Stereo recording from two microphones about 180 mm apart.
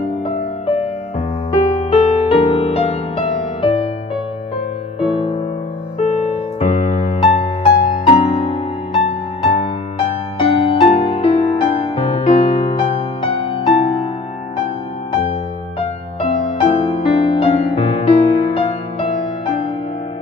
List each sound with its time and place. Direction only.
1.5 s music: 30° left (ahead or behind)
5.0 s music: 30° left (ahead or behind)
6.6 s music: 40° left (ahead or behind)
16.2 s music: 30° left (ahead or behind)